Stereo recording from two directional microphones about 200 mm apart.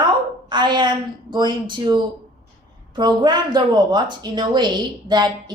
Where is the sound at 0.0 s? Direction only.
20° right (ahead or behind).